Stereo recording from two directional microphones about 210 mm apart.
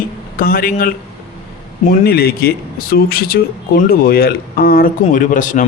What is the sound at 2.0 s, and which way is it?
A man's voice, 45° left (ahead or behind).